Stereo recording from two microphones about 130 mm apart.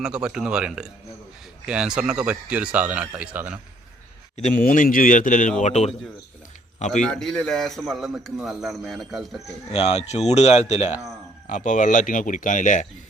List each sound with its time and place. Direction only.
0.0 s a man's voice: 5° right (ahead or behind)
4.4 s speech: 75° left (ahead or behind)
5.6 s speech: 60° left (ahead or behind)
7.0 s a man's voice: 5° left (ahead or behind)
9.7 s speech: 55° left (ahead or behind)
11.4 s speech: 75° left (ahead or behind)